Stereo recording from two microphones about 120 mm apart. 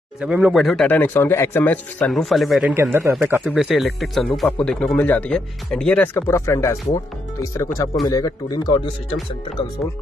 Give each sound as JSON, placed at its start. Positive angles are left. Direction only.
{"t": 0.2, "sound": "speech", "side_deg": -5}
{"t": 0.8, "sound": "speech", "side_deg": 15}
{"t": 2.0, "sound": "speech", "side_deg": 0}
{"t": 2.6, "sound": "speech", "side_deg": -20}
{"t": 3.3, "sound": "speech", "side_deg": -5}